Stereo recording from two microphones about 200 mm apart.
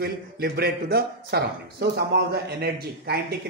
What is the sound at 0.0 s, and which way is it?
A man's voice, 50° right (ahead or behind).